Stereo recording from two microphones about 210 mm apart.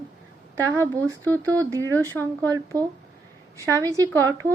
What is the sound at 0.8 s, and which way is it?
Speech, 15° right (ahead or behind).